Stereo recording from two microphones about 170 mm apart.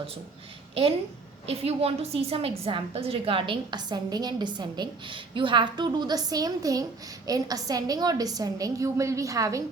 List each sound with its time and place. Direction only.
0.7 s a woman's voice: 35° right (ahead or behind)